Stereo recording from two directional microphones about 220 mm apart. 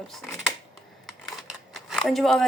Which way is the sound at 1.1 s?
Centre (ahead or behind).